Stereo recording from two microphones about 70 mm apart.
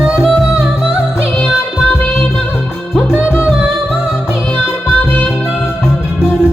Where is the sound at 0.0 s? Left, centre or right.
Centre.